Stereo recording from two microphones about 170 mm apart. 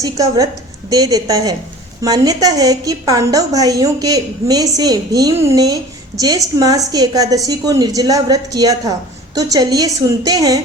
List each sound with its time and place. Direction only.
0.0 s a woman's voice: 20° right (ahead or behind)